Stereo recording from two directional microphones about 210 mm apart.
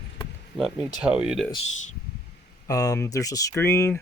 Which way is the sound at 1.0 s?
5° right (ahead or behind).